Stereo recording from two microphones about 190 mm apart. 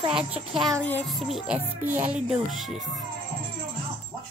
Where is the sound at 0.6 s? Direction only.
5° left (ahead or behind).